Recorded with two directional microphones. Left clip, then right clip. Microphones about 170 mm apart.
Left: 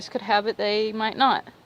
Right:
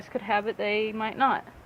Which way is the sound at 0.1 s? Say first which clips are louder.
Left 4 dB; 45° left (ahead or behind).